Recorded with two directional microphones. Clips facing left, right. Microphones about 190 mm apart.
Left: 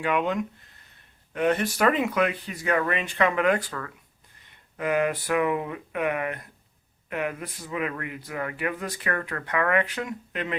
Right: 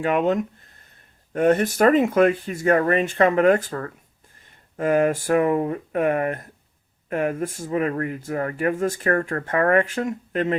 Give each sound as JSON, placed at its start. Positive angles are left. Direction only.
{"t": 0.0, "sound": "speech", "side_deg": -45}